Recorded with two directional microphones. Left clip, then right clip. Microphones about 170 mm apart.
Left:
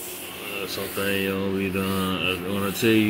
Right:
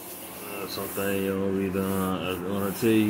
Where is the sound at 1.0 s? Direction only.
Centre (ahead or behind).